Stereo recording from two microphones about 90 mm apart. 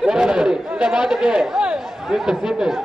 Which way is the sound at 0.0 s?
10° right (ahead or behind).